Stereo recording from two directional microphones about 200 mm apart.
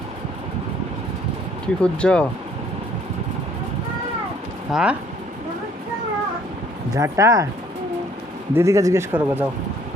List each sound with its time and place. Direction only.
1.6 s speech: 5° left (ahead or behind)
4.7 s speech: 5° right (ahead or behind)
6.9 s speech: 15° right (ahead or behind)
8.5 s speech: 15° right (ahead or behind)